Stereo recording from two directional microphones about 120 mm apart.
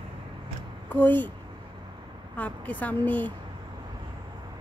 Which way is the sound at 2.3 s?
10° left (ahead or behind).